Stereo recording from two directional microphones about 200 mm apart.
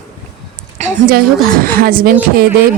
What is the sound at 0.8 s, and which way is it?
Speech, 45° right (ahead or behind).